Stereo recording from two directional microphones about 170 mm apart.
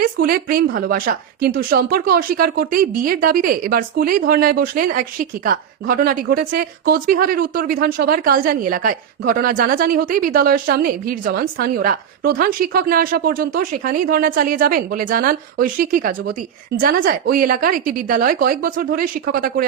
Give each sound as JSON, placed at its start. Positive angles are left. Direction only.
{"t": 0.0, "sound": "speech", "side_deg": -60}